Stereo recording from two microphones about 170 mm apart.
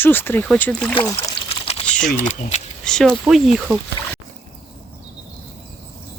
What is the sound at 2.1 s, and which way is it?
Speech, 45° left (ahead or behind).